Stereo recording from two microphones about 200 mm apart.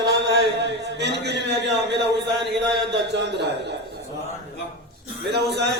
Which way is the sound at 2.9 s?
60° right (ahead or behind).